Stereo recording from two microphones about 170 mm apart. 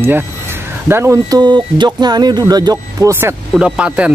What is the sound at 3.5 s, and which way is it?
Speech, 5° right (ahead or behind).